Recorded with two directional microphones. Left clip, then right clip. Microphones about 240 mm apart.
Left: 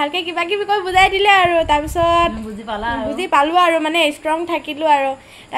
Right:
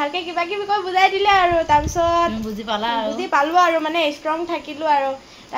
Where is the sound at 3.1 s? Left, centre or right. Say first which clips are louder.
Left 4 dB; left.